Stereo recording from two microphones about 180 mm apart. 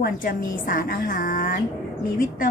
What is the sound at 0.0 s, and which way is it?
A woman's voice, 50° left (ahead or behind).